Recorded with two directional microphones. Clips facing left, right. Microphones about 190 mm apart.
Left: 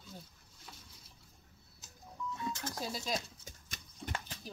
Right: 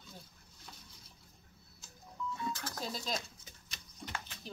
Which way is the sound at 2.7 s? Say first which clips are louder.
Left 1 dB; 10° left (ahead or behind).